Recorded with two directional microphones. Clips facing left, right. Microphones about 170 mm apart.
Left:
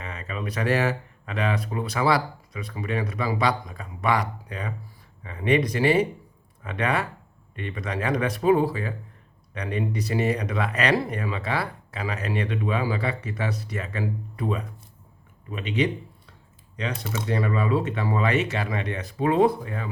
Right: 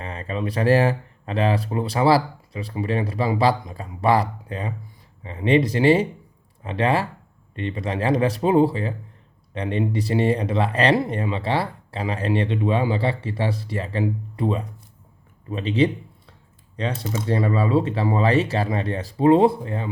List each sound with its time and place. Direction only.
0.0 s speech: 30° right (ahead or behind)